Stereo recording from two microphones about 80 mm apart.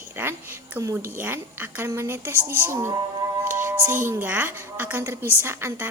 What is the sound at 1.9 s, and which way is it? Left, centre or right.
A woman's voice, right.